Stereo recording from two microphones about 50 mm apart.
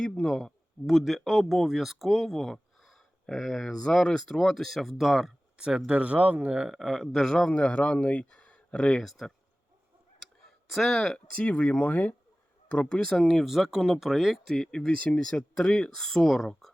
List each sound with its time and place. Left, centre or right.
0.2 s speech: centre
0.9 s speech: centre
5.5 s speech: centre
6.7 s speech: centre
7.4 s speech: left
8.3 s a sound: left
9.0 s speech: centre
10.7 s speech: centre
11.3 s speech: left
12.6 s speech: left
13.2 s speech: centre
14.4 s speech: centre
14.7 s speech: centre